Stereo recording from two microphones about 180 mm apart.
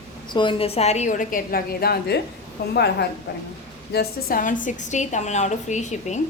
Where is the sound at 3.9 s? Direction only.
55° left (ahead or behind); by 6.2 s 40° left (ahead or behind).